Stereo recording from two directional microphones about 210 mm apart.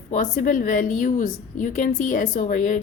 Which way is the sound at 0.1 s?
40° left (ahead or behind).